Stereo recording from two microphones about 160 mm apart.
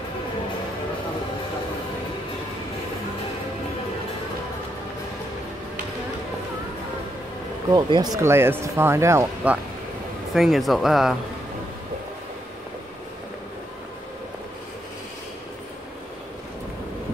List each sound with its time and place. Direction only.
7.7 s speech: 25° right (ahead or behind)
10.3 s speech: centre (ahead or behind)